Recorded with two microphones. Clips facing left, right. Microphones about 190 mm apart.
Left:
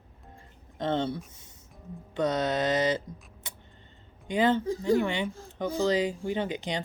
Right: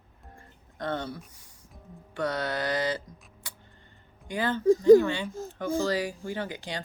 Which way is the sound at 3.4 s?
20° left (ahead or behind).